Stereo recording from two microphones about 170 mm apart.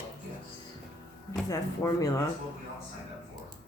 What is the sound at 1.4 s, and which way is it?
Speech, 20° left (ahead or behind).